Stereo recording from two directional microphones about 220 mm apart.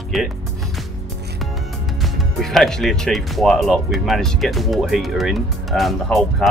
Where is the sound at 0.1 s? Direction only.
Centre (ahead or behind).